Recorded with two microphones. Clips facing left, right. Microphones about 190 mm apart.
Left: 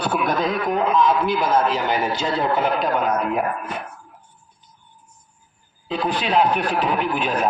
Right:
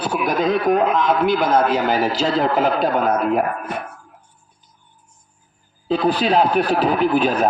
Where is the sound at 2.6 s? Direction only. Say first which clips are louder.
Right 3 dB; 35° right (ahead or behind).